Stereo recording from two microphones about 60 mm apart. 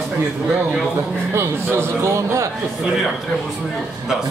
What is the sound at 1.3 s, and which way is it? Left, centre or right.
A man's voice, right.